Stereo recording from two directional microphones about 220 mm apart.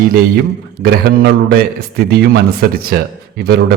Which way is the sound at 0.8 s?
45° right (ahead or behind).